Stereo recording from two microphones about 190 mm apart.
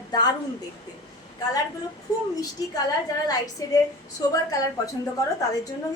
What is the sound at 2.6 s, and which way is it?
Speech, 20° left (ahead or behind).